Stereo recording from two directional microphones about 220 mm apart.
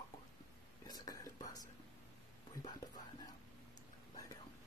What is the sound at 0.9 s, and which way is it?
Whispering, 15° left (ahead or behind).